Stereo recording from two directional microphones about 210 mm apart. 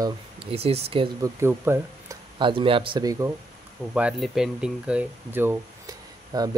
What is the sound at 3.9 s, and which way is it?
Speech, 5° right (ahead or behind).